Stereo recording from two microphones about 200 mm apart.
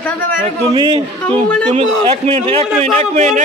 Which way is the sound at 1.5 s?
5° left (ahead or behind).